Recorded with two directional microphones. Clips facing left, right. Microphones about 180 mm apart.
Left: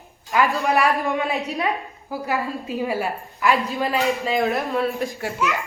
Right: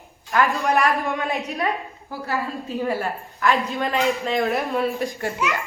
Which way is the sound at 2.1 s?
15° left (ahead or behind).